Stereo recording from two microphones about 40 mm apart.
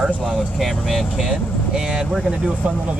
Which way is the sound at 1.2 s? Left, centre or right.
Centre.